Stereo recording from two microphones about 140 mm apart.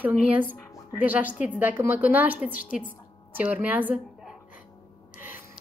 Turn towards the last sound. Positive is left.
turn(degrees=-10)  # may be behind; listen again after turning